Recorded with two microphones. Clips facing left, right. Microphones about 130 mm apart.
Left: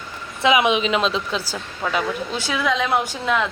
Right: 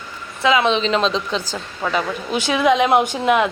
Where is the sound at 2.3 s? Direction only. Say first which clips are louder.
Right 6 dB; 20° right (ahead or behind).